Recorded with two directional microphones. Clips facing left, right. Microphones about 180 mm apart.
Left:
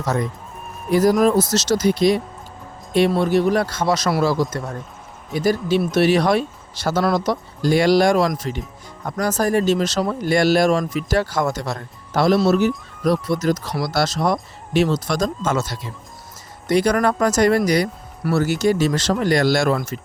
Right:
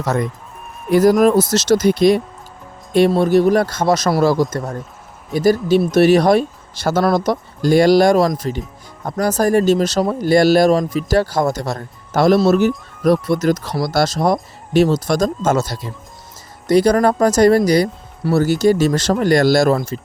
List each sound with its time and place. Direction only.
0.9 s speech: 55° right (ahead or behind)
13.7 s speech: 45° right (ahead or behind)